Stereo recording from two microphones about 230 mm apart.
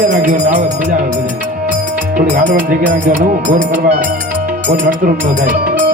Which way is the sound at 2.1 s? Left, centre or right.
Right.